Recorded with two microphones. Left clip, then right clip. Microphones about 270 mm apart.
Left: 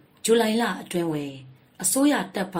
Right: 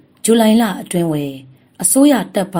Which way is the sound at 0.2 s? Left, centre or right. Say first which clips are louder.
Right 8 dB; right.